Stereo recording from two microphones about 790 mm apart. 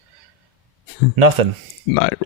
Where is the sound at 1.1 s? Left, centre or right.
Right.